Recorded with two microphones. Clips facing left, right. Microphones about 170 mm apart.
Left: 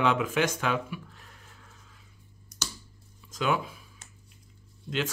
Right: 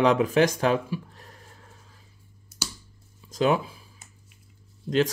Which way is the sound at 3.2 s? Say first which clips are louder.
Right 5 dB; 35° right (ahead or behind).